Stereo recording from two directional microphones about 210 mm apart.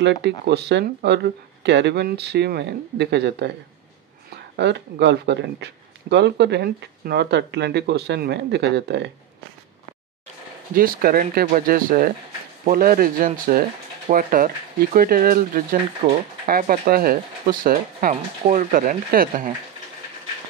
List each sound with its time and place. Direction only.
0.5 s speech: 55° right (ahead or behind)
4.6 s speech: 55° right (ahead or behind)
10.7 s speech: 45° right (ahead or behind)